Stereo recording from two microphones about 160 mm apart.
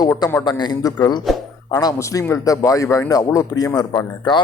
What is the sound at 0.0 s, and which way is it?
Speech, 20° left (ahead or behind).